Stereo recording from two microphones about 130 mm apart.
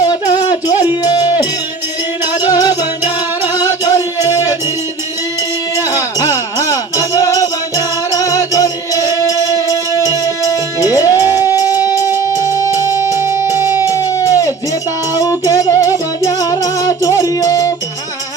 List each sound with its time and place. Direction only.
0.0 s music: 30° left (ahead or behind)
2.5 s music: 30° left (ahead or behind)
6.0 s music: 25° left (ahead or behind)
10.8 s music: 25° left (ahead or behind)
11.2 s music: 20° right (ahead or behind)
12.4 s music: 25° left (ahead or behind)
13.1 s music: 20° right (ahead or behind)
13.8 s music: 25° left (ahead or behind)